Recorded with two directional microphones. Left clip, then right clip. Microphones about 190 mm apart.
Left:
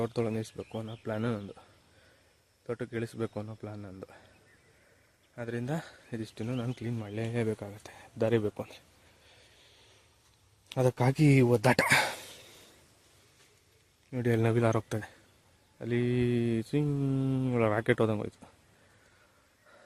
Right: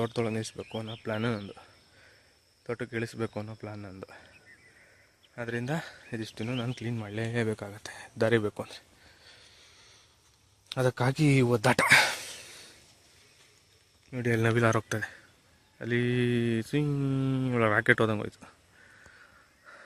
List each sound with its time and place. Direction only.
0.0 s speech: centre (ahead or behind)
0.7 s speech: 10° right (ahead or behind)
2.6 s speech: 5° right (ahead or behind)
5.3 s speech: 5° right (ahead or behind)
10.7 s speech: 15° left (ahead or behind)
11.9 s a sound: centre (ahead or behind)
14.1 s speech: 15° left (ahead or behind)
14.4 s speech: centre (ahead or behind)
19.7 s a sound: 10° right (ahead or behind)